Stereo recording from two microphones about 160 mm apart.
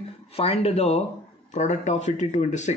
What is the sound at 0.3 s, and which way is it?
Speech, 40° left (ahead or behind).